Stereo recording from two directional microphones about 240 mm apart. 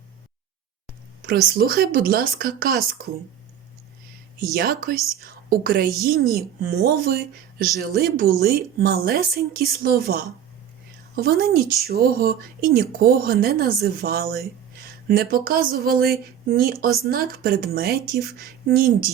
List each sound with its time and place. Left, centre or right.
1.3 s speech: right
4.5 s speech: right